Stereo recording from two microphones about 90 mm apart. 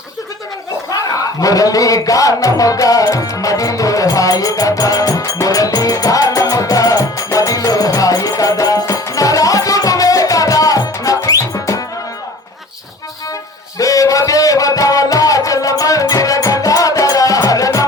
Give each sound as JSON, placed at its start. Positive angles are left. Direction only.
{"t": 0.9, "sound": "music", "side_deg": 40}
{"t": 13.7, "sound": "music", "side_deg": 40}